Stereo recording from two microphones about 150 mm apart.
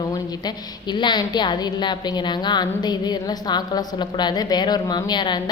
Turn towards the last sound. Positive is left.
turn(degrees=30)  # may be behind; listen again after turning